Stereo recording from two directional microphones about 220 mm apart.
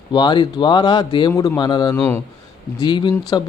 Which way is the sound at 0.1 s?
20° left (ahead or behind).